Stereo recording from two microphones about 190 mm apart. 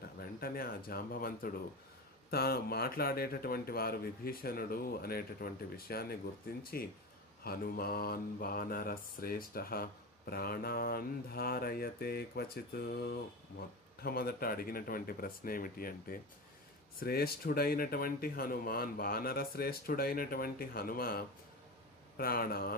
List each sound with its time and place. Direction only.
0.2 s mantra: 50° left (ahead or behind)